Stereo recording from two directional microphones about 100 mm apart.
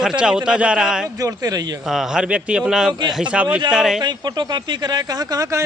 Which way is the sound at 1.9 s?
5° right (ahead or behind).